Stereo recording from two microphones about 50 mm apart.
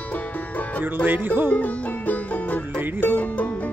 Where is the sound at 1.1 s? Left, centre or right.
Right.